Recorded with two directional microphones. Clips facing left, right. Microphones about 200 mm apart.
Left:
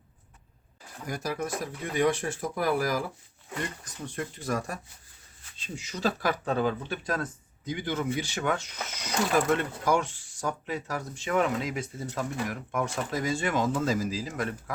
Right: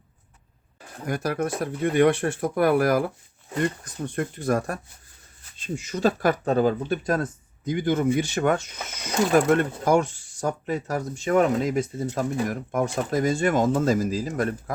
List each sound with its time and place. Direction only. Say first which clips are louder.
0.8 s speech: right 7 dB; 60° right (ahead or behind)